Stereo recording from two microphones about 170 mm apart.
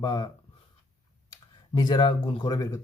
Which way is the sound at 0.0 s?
25° left (ahead or behind).